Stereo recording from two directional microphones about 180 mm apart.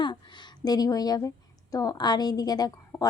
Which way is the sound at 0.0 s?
25° left (ahead or behind).